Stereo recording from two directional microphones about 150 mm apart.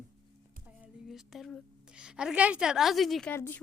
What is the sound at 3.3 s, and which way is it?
Speech, 15° left (ahead or behind).